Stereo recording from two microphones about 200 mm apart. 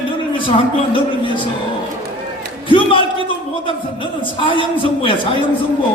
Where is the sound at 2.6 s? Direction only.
25° left (ahead or behind).